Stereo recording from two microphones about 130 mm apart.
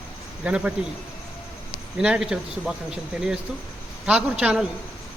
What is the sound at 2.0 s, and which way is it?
Speech, 5° right (ahead or behind).